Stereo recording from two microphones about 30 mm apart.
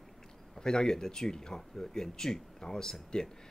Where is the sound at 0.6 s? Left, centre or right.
Left.